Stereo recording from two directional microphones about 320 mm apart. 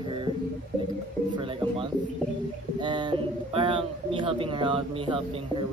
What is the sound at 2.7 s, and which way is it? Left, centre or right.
Speech, centre.